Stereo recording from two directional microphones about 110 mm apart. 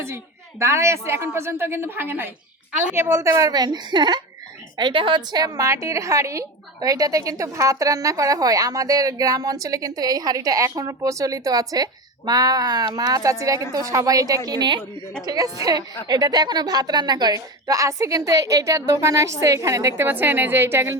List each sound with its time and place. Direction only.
0.6 s a woman's voice: 25° right (ahead or behind)